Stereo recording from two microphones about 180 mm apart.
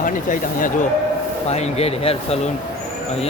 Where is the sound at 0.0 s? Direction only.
45° left (ahead or behind).